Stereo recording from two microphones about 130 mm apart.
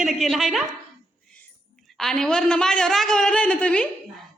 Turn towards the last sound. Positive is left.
turn(degrees=10)  # may be behind; listen again after turning